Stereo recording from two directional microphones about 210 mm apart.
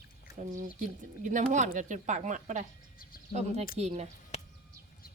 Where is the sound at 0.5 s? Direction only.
35° right (ahead or behind).